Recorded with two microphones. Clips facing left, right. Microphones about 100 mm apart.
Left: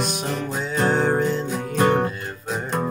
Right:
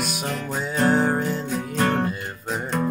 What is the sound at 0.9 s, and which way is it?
Music, 5° right (ahead or behind).